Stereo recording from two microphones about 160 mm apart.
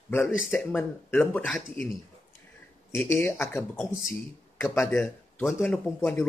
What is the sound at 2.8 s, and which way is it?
Speech, 15° left (ahead or behind).